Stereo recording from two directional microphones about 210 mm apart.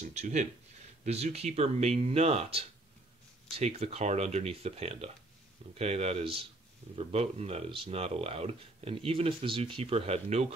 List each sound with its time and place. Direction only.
0.1 s speech: 35° right (ahead or behind)